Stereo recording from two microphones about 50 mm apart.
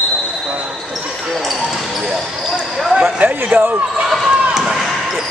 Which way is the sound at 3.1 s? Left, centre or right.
Right.